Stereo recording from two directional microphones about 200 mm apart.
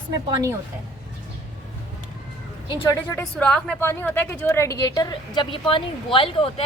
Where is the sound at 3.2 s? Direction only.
5° left (ahead or behind).